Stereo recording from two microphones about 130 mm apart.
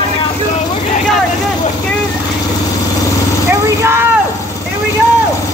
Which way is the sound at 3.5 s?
20° right (ahead or behind).